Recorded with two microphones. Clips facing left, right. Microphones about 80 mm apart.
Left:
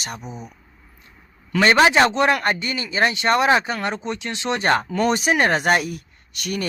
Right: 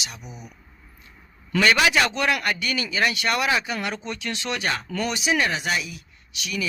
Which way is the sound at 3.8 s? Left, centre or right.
Left.